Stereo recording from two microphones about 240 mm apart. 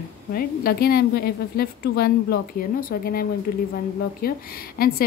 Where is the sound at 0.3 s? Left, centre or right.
Left.